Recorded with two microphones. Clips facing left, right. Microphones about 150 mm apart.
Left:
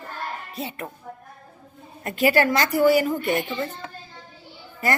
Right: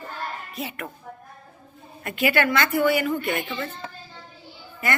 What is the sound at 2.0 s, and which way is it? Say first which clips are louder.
A woman's voice: left 3 dB; 35° left (ahead or behind).